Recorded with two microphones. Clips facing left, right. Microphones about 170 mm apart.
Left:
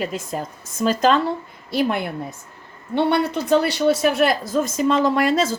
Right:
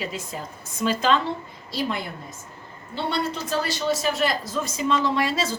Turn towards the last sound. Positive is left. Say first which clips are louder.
# left 6 dB
turn(degrees=50)  # may be behind; listen again after turning